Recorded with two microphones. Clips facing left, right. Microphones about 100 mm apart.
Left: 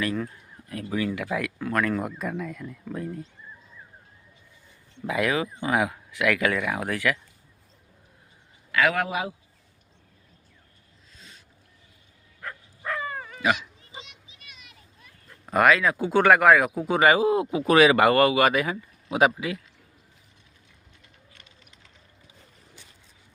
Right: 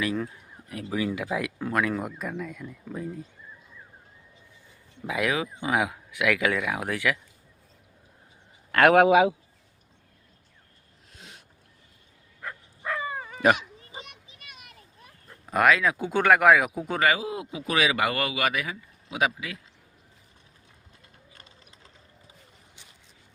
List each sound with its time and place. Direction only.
0.0 s speech: 10° right (ahead or behind)
5.0 s speech: 10° right (ahead or behind)
8.7 s a man's voice: 60° right (ahead or behind)
11.1 s a sound: 70° right (ahead or behind)
12.4 s dog: 5° right (ahead or behind)
13.4 s children playing: 45° right (ahead or behind)
15.4 s speech: centre (ahead or behind)
17.2 s speech: 40° left (ahead or behind)
21.3 s a sound: 35° right (ahead or behind)